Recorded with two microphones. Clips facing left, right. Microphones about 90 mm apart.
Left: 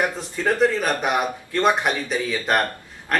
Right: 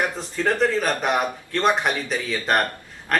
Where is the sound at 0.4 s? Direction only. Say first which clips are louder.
Left 1 dB; 5° left (ahead or behind).